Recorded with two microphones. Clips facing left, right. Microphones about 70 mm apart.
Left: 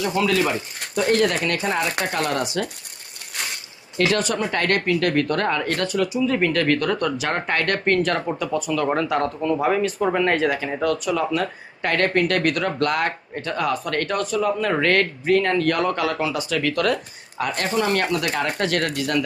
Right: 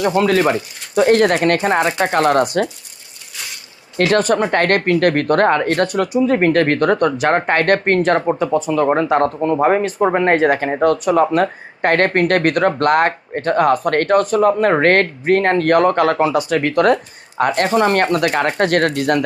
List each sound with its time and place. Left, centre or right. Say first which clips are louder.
0.0 s speech: right 6 dB; right
3.9 s speech: right 6 dB; right
9.0 s speech: right 6 dB; right